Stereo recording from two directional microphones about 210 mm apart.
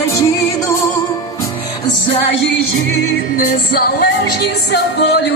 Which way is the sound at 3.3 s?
45° left (ahead or behind).